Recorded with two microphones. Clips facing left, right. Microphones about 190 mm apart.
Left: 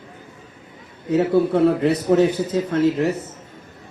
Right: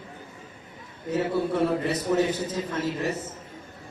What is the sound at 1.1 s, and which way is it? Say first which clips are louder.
A man's voice: left 8 dB; 65° left (ahead or behind).